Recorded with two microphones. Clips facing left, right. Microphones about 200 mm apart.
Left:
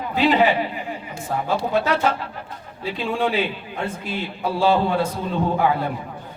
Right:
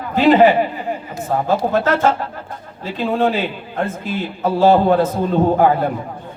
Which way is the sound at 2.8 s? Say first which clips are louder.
Right 5 dB; 45° right (ahead or behind).